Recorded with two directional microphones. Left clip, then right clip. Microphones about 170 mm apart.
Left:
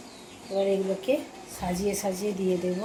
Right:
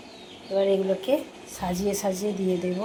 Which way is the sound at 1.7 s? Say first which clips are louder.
Right 1 dB; 5° left (ahead or behind).